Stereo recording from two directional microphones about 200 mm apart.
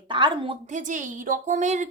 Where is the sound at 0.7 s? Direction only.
40° right (ahead or behind).